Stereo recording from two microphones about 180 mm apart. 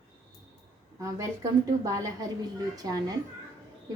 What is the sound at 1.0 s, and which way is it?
A woman's voice, 20° right (ahead or behind).